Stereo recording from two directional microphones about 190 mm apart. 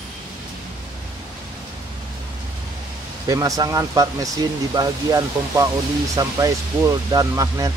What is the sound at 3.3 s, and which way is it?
Speech, 15° right (ahead or behind).